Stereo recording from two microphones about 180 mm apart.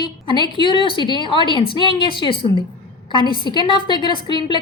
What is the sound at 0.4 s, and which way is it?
A woman's voice, 25° left (ahead or behind).